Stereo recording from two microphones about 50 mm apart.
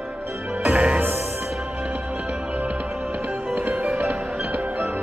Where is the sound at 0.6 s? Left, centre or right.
Right.